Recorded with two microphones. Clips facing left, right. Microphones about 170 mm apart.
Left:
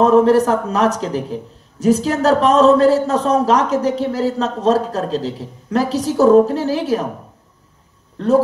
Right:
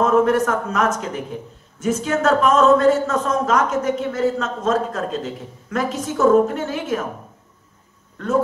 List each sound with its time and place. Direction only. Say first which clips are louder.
0.0 s a man's voice: left 5 dB; 35° left (ahead or behind)
8.2 s a man's voice: left 7 dB; 35° left (ahead or behind)